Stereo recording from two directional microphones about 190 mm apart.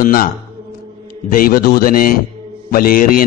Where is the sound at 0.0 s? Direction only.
50° left (ahead or behind).